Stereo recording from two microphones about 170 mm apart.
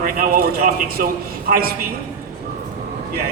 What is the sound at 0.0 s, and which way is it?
A woman's voice, 60° right (ahead or behind).